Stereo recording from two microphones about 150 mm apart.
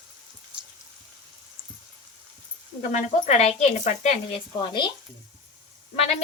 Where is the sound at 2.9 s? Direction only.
50° left (ahead or behind).